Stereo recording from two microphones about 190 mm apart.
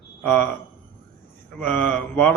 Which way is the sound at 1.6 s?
10° left (ahead or behind).